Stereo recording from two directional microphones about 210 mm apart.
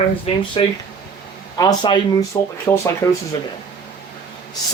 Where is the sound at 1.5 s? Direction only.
20° left (ahead or behind).